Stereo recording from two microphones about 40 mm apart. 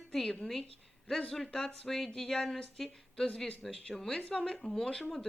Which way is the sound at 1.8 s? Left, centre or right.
Centre.